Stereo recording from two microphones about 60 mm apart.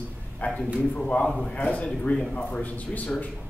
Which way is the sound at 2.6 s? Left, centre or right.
Left.